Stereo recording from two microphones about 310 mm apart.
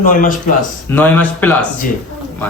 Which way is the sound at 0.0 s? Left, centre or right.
Left.